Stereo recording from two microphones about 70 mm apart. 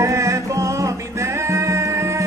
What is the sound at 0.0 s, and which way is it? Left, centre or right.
Music, right.